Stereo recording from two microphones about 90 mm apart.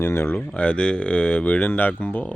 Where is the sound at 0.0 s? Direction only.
25° left (ahead or behind).